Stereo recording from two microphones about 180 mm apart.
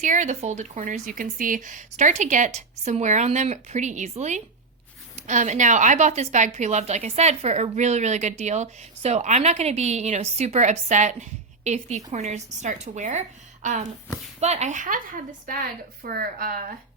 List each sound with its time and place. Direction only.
0.0 s a woman's voice: 45° right (ahead or behind)